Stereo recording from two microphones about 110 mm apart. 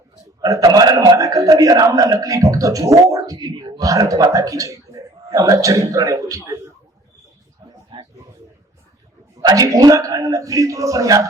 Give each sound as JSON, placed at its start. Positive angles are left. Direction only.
{"t": 0.7, "sound": "a man's voice", "side_deg": -35}
{"t": 9.4, "sound": "a man's voice", "side_deg": -35}